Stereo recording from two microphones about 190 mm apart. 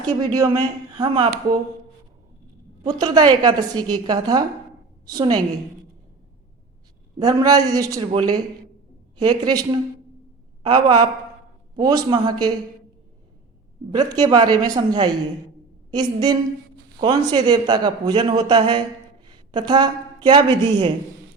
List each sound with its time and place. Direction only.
0.1 s a woman's voice: 20° right (ahead or behind)
2.8 s a woman's voice: 20° right (ahead or behind)
7.2 s a woman's voice: 20° right (ahead or behind)
13.9 s a woman's voice: 20° right (ahead or behind)